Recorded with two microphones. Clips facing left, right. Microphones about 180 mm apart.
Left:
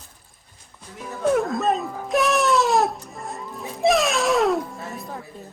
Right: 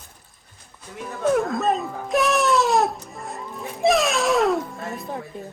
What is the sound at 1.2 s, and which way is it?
Wail, centre (ahead or behind).